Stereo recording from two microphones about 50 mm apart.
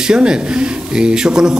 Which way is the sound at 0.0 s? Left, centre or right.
Centre.